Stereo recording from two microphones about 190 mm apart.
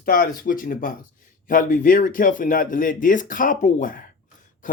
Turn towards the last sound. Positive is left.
turn(degrees=45)  # may be behind; listen again after turning